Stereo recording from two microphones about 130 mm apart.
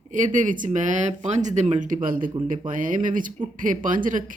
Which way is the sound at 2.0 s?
90° right.